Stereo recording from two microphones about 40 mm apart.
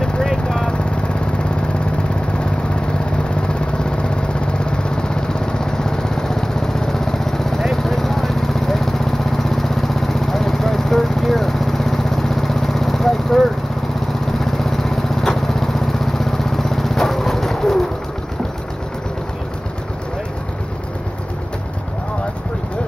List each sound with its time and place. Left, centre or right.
0.5 s vehicle: left
14.4 s lawn mower: centre